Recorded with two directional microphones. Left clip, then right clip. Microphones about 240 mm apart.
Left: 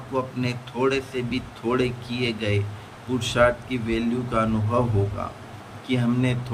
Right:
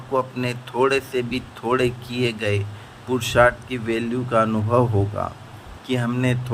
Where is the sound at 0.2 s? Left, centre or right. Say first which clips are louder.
Left 1 dB; right.